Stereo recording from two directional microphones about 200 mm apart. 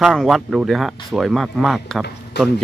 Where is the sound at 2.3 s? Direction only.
55° left (ahead or behind).